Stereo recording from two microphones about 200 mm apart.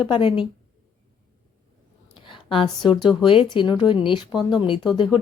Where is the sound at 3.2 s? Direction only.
25° left (ahead or behind).